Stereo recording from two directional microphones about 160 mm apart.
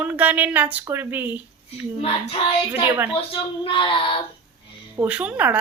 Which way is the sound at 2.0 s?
35° left (ahead or behind).